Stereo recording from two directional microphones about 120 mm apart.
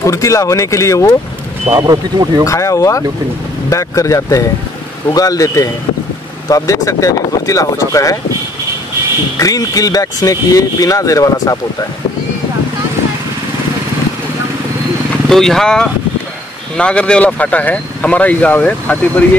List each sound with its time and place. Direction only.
0.0 s speech: 25° left (ahead or behind)
1.7 s speech: 35° right (ahead or behind)
2.4 s speech: 25° left (ahead or behind)
9.4 s speech: 30° left (ahead or behind)
15.2 s speech: 5° left (ahead or behind)